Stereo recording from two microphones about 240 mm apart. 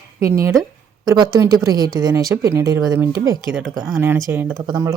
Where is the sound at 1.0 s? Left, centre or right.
Centre.